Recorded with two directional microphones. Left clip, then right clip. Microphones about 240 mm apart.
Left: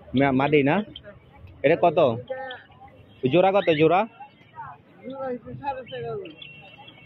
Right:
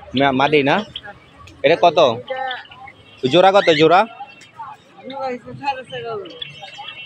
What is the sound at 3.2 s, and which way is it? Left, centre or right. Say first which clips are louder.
Speech: right 7 dB; centre.